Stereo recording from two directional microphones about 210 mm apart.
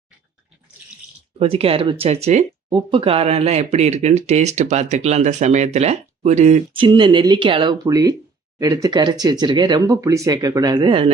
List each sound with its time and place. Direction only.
1.4 s speech: 30° right (ahead or behind)